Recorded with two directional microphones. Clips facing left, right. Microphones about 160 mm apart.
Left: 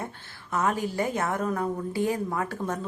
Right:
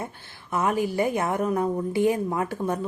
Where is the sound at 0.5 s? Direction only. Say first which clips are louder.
Right 3 dB; 15° right (ahead or behind).